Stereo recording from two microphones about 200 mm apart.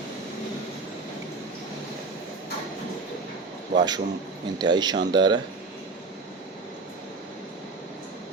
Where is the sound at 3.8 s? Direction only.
20° right (ahead or behind).